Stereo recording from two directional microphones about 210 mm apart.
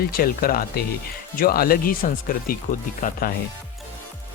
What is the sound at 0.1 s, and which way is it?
Speech, 45° left (ahead or behind).